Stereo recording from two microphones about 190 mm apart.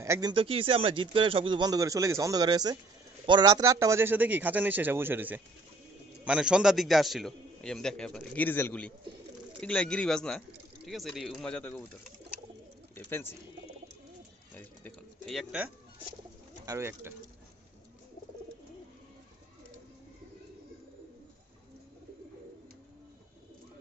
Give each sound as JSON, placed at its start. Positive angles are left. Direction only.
{"t": 0.0, "sound": "speech", "side_deg": -15}
{"t": 0.3, "sound": "a man's voice", "side_deg": -30}
{"t": 12.9, "sound": "speech", "side_deg": 10}
{"t": 14.5, "sound": "a sound", "side_deg": 10}
{"t": 16.6, "sound": "a man's voice", "side_deg": -15}